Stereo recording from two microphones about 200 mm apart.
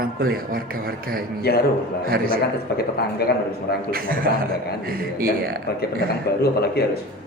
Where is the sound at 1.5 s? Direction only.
55° left (ahead or behind).